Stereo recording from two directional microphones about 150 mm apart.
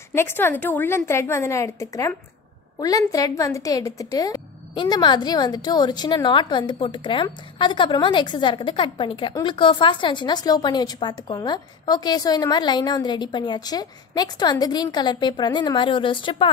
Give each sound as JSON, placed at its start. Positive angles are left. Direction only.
{"t": 0.1, "sound": "a woman's voice", "side_deg": 15}